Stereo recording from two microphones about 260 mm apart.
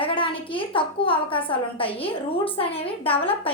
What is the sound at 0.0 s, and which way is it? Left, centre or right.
A woman's voice, centre.